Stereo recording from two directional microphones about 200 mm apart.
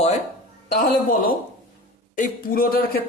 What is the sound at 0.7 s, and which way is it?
A man's voice, 45° left (ahead or behind).